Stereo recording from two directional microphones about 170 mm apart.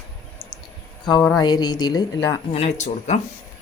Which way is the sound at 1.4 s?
25° left (ahead or behind).